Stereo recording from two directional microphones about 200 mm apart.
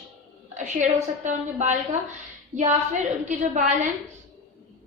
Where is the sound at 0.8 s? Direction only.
40° right (ahead or behind).